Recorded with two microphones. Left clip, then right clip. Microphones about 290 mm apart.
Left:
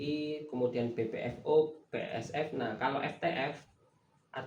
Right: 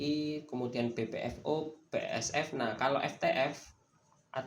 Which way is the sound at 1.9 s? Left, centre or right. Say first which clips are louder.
Right 3 dB; right.